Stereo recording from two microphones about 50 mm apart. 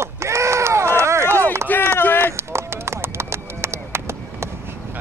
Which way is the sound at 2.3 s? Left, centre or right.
Right.